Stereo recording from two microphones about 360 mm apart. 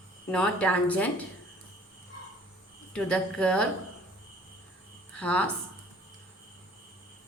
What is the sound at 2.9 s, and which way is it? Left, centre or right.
Speech, centre.